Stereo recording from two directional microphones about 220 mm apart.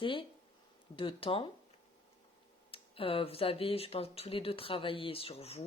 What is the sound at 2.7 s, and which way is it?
Speech, 25° left (ahead or behind).